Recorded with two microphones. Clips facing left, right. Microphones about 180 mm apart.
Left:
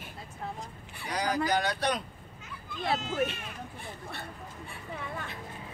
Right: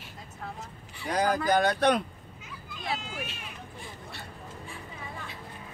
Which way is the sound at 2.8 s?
60° left (ahead or behind).